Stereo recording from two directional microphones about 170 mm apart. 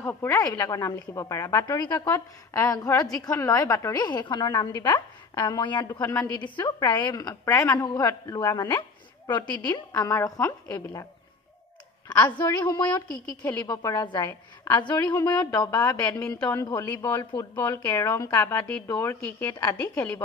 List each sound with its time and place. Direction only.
0.0 s a woman's voice: 15° left (ahead or behind)
9.3 s a woman's voice: 10° left (ahead or behind)
12.1 s a woman's voice: 25° left (ahead or behind)
16.3 s a woman's voice: 5° left (ahead or behind)
17.2 s a woman's voice: 25° left (ahead or behind)
17.6 s a woman's voice: 15° left (ahead or behind)
19.8 s a woman's voice: 10° left (ahead or behind)